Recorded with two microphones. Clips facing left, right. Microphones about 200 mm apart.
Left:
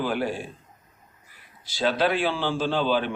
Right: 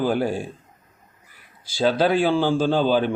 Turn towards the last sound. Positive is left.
turn(degrees=-40)  # may be behind; listen again after turning